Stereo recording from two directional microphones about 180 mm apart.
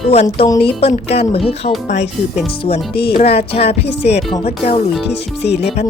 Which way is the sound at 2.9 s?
60° left (ahead or behind).